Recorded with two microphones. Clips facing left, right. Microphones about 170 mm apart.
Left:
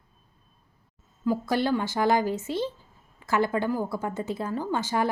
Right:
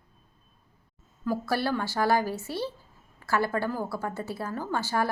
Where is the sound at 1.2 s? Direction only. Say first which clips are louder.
Left 3 dB; 15° left (ahead or behind).